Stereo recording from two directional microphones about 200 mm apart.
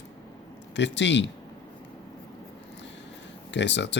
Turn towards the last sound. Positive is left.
turn(degrees=60)  # may be behind; listen again after turning